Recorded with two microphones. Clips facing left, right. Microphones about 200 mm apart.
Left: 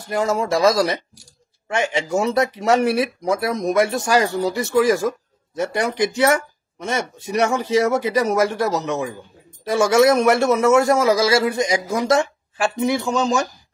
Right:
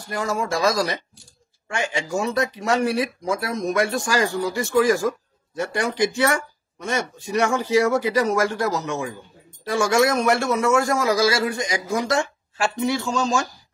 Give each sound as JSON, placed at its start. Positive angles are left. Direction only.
{"t": 0.0, "sound": "a man's voice", "side_deg": 25}